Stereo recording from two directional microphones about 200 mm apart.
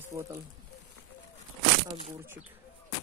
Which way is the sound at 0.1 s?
15° right (ahead or behind).